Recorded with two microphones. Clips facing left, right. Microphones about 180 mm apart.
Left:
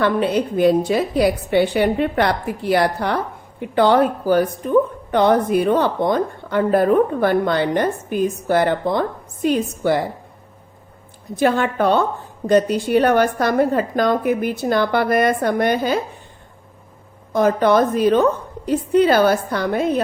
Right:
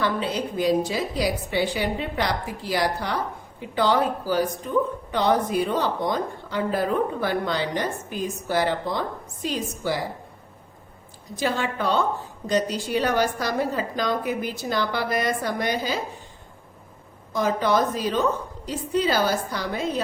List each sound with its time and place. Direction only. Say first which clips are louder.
0.0 s a woman's voice: left 7 dB; 60° left (ahead or behind)
11.3 s a woman's voice: left 8 dB; 55° left (ahead or behind)
17.3 s a woman's voice: left 7 dB; 55° left (ahead or behind)